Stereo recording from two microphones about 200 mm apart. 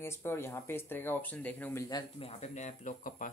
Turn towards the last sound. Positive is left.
turn(degrees=40)  # may be behind; listen again after turning